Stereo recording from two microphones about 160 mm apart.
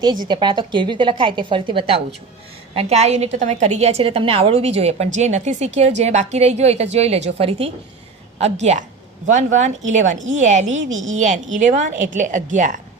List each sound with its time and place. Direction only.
0.3 s a woman's voice: 30° right (ahead or behind)
2.7 s a woman's voice: 45° right (ahead or behind)